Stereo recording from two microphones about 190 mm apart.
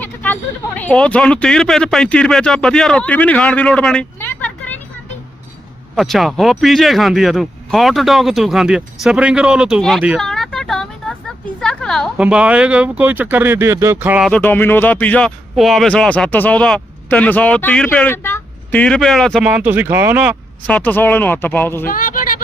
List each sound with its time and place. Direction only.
0.0 s speech: 10° left (ahead or behind)
6.0 s speech: centre (ahead or behind)
20.7 s speech: 10° left (ahead or behind)
21.8 s a sound: 45° left (ahead or behind)